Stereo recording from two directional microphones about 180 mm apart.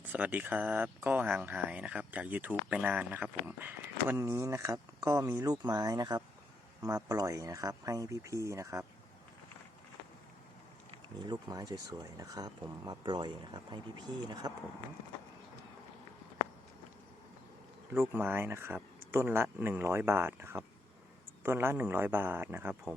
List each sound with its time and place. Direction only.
0.0 s speech: 10° right (ahead or behind)
11.2 s speech: 25° right (ahead or behind)
18.1 s speech: 10° right (ahead or behind)